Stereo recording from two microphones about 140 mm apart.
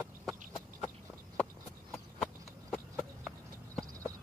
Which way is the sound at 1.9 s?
5° left (ahead or behind).